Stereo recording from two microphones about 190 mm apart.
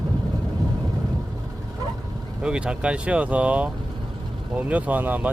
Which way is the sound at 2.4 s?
5° right (ahead or behind).